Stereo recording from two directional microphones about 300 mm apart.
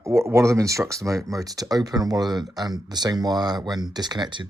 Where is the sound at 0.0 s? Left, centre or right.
Centre.